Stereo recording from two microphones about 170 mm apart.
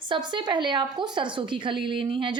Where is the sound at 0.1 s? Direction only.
25° right (ahead or behind).